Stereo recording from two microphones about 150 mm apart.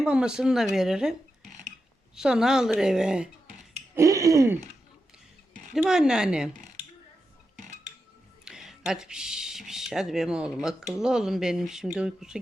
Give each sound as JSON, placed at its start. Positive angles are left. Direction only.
{"t": 0.0, "sound": "speech", "side_deg": -5}
{"t": 3.9, "sound": "a sound", "side_deg": -20}
{"t": 5.7, "sound": "speech", "side_deg": -5}
{"t": 8.4, "sound": "speech", "side_deg": -5}